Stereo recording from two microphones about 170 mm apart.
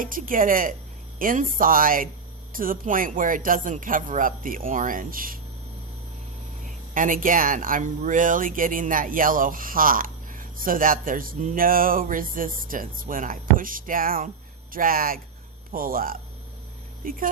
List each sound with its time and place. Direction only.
0.0 s speech: 55° right (ahead or behind)
6.9 s speech: 50° right (ahead or behind)